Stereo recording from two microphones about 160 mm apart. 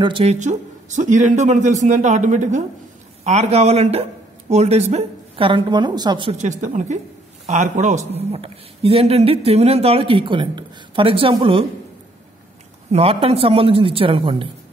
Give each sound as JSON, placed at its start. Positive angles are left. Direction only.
{"t": 0.0, "sound": "a man's voice", "side_deg": -35}
{"t": 6.3, "sound": "a man's voice", "side_deg": -50}
{"t": 12.9, "sound": "a man's voice", "side_deg": -35}